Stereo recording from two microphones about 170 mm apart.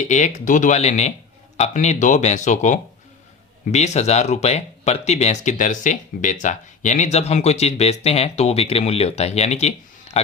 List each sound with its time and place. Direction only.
0.0 s speech: 45° left (ahead or behind)